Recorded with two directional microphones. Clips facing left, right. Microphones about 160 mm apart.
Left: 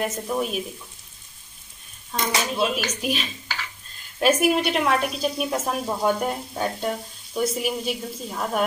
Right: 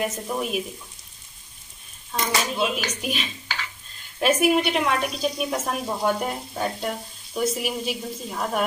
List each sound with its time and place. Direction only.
0.0 s a woman's voice: centre (ahead or behind)
2.1 s a woman's voice: centre (ahead or behind)